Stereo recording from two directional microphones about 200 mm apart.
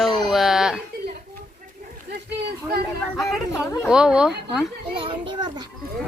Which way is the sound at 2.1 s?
55° right (ahead or behind).